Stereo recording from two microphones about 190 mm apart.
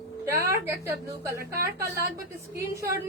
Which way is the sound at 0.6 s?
15° right (ahead or behind).